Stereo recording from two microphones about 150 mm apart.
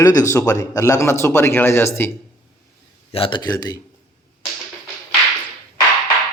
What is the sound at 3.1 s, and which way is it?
Speech, 35° left (ahead or behind).